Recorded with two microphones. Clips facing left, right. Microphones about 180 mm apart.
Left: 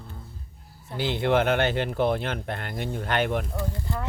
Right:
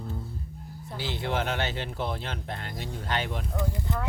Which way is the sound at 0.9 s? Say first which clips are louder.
Left 7 dB; 60° left (ahead or behind).